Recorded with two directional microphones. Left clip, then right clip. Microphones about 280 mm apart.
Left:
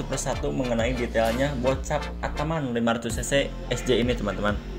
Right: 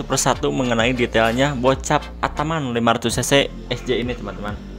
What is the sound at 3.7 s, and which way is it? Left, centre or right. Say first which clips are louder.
Speech: right 1 dB; centre.